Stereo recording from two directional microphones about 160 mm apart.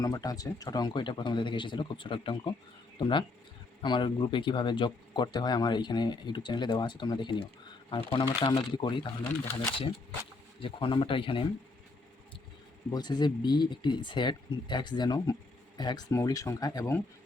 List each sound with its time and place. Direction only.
0.0 s speech: 25° left (ahead or behind)
10.6 s speech: 35° left (ahead or behind)
12.9 s speech: 25° left (ahead or behind)